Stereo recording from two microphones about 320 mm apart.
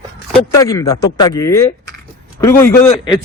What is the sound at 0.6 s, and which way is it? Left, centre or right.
A man's voice, centre.